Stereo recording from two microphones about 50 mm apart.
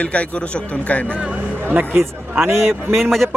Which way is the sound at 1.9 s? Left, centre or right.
Right.